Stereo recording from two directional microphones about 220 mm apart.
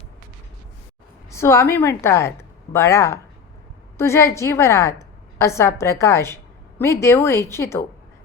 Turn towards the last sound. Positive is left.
turn(degrees=10)  # may be behind; listen again after turning